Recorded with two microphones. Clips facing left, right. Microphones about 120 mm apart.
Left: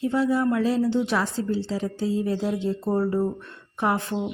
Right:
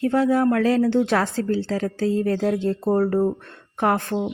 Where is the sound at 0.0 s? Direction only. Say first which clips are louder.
Right 4 dB; 60° right (ahead or behind).